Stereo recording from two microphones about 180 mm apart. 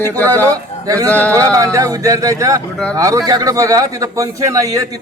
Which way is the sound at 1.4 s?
20° right (ahead or behind).